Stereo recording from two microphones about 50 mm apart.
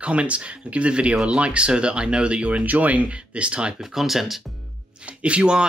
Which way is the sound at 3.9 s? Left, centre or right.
Centre.